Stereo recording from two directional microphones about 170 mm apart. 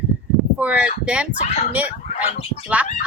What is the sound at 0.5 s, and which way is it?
Speech, 10° right (ahead or behind).